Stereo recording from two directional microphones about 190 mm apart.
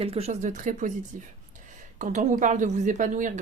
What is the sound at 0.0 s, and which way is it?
Speech, 30° right (ahead or behind).